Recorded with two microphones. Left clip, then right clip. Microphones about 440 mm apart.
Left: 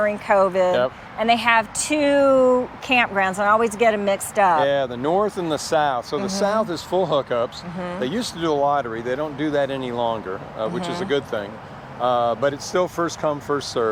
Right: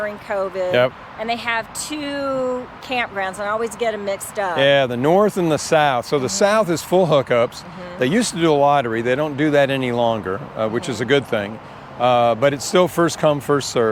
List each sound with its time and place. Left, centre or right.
0.0 s speech: left
4.6 s speech: right